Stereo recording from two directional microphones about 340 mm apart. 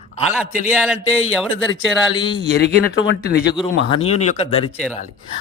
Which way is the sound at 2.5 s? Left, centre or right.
Left.